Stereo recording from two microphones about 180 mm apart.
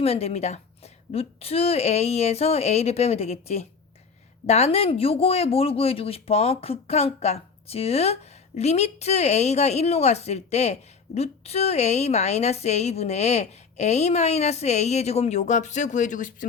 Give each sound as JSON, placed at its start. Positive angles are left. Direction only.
{"t": 0.0, "sound": "speech", "side_deg": 35}